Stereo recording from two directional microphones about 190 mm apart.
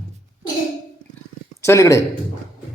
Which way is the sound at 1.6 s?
15° left (ahead or behind).